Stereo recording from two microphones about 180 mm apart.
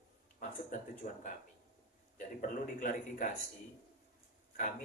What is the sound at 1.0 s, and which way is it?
A man's voice, 45° left (ahead or behind).